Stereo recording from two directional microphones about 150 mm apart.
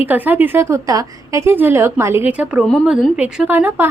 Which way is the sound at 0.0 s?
10° right (ahead or behind).